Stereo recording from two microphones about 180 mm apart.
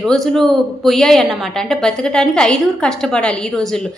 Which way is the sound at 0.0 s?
Centre (ahead or behind).